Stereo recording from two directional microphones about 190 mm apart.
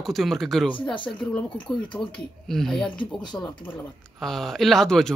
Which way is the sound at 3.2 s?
20° left (ahead or behind).